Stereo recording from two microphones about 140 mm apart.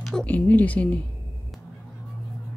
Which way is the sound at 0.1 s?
10° left (ahead or behind).